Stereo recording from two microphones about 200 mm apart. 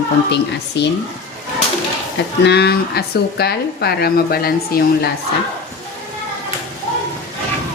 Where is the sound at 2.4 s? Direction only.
55° left (ahead or behind).